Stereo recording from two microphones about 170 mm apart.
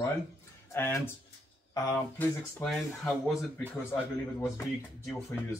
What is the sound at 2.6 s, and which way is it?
Speech, centre (ahead or behind).